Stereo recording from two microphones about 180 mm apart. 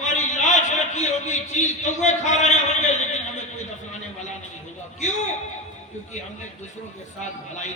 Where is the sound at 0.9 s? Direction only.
40° left (ahead or behind).